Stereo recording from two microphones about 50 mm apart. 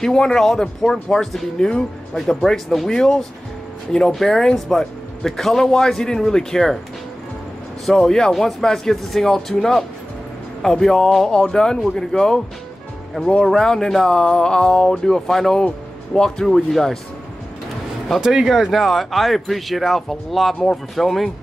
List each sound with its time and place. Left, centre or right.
0.0 s a man's voice: centre
2.9 s speech: centre
7.8 s a man's voice: centre
13.5 s a man's voice: centre
18.2 s speech: centre
18.7 s a man's voice: centre